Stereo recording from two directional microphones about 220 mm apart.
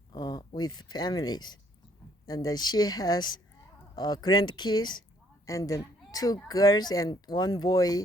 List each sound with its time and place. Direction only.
0.1 s speech: 20° left (ahead or behind)